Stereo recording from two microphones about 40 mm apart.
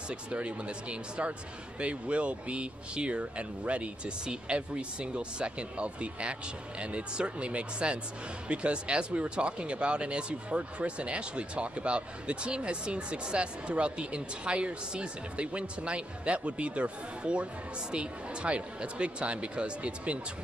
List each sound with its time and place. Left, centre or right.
0.1 s speech: right